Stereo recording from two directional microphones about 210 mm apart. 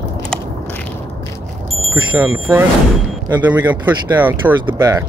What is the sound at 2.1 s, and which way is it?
Speech, 15° right (ahead or behind).